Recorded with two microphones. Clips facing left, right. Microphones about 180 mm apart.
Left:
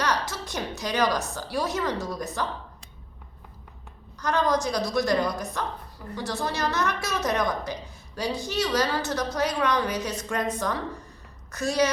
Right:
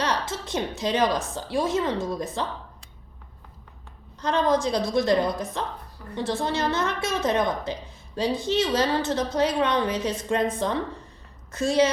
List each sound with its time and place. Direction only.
0.0 s a woman's voice: 25° right (ahead or behind)
4.2 s a woman's voice: 25° right (ahead or behind)